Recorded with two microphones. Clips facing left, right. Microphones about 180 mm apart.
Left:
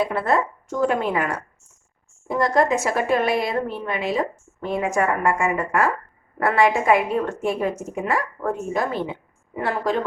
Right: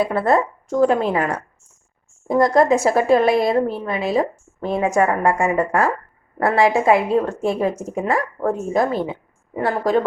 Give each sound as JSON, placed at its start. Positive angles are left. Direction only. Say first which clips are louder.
{"t": 0.0, "sound": "a woman's voice", "louder": "right 4 dB", "side_deg": -40}